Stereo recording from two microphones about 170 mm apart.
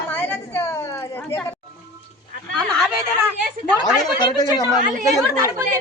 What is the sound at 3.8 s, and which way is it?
Speech, 25° left (ahead or behind).